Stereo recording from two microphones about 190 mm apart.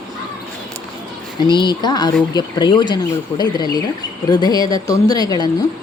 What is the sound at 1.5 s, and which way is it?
A woman's voice, 25° left (ahead or behind).